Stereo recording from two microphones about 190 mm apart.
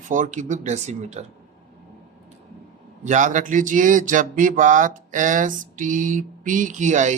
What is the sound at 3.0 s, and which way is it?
Speech, 40° right (ahead or behind).